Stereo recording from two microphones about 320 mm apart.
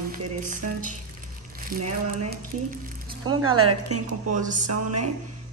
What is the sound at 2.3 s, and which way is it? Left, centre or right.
Speech, right.